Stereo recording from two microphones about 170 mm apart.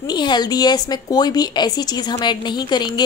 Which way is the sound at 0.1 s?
25° left (ahead or behind).